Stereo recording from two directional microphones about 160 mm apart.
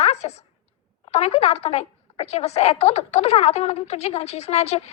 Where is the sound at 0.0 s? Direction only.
40° left (ahead or behind).